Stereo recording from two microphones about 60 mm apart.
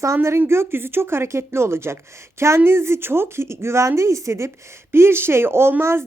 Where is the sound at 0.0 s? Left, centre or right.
Right.